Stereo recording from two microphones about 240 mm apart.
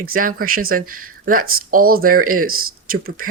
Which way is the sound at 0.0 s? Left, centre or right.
Right.